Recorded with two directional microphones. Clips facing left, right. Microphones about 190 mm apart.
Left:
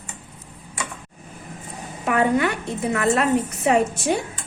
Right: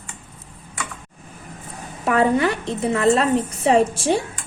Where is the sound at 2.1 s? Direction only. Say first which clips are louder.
Right 2 dB; 30° right (ahead or behind).